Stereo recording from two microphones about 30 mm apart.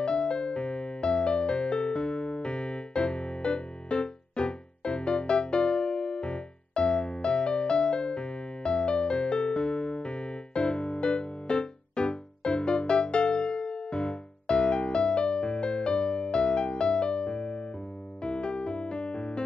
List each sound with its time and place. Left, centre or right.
0.0 s music: left